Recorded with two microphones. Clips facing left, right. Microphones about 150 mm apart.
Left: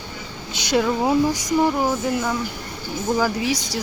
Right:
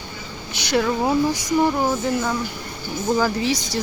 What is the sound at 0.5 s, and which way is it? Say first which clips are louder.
Speech: left 1 dB; 20° left (ahead or behind).